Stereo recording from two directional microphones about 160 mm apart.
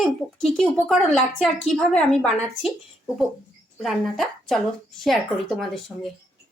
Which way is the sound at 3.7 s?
Centre (ahead or behind).